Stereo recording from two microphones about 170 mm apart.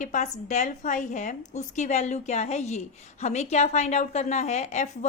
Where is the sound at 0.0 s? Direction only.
45° left (ahead or behind).